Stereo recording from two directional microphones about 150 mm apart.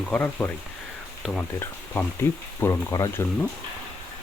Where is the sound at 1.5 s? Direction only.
15° left (ahead or behind).